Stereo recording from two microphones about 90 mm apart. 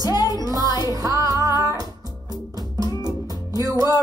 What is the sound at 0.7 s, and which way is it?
Music, 45° left (ahead or behind).